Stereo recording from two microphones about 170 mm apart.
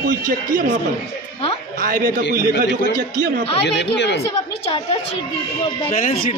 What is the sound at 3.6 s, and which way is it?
Speech, 90° left.